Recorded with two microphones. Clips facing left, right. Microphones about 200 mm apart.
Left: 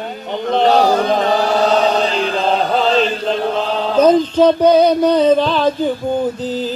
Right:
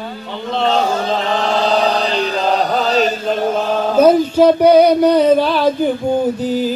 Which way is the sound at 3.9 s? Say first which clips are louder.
Right 1 dB; 10° right (ahead or behind).